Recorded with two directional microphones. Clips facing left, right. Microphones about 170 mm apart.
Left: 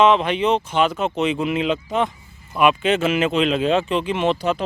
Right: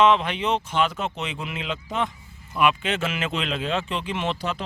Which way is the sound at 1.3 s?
20° left (ahead or behind).